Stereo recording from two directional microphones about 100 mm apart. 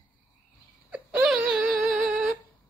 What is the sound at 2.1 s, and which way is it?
Humming, 15° right (ahead or behind).